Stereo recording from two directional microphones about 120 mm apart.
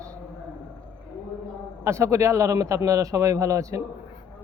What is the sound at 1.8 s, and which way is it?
A man's voice, 25° right (ahead or behind).